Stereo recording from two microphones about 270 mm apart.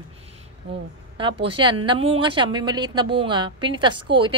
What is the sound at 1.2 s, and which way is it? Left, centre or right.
Speech, centre.